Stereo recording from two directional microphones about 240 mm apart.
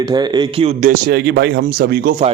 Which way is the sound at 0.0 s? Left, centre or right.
Centre.